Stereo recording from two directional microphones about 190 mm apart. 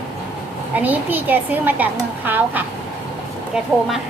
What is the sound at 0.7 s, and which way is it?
A woman's voice, 10° right (ahead or behind).